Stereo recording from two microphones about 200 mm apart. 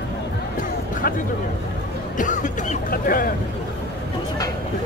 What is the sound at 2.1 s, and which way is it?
Speech, 40° left (ahead or behind).